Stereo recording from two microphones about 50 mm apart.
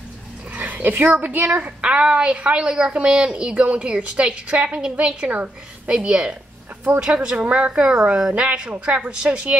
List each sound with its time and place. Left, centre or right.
0.6 s speech: right
1.6 s a woman's voice: right
7.3 s a woman's voice: right